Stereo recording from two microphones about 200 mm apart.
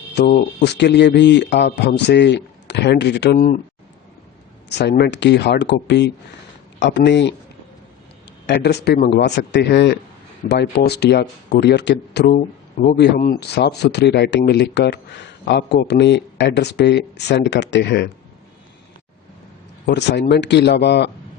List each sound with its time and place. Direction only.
0.1 s speech: 55° left (ahead or behind)
3.3 s speech: 40° left (ahead or behind)
4.8 s speech: 55° left (ahead or behind)
8.4 s speech: 55° left (ahead or behind)
13.0 s speech: 50° left (ahead or behind)
19.8 s speech: 60° left (ahead or behind)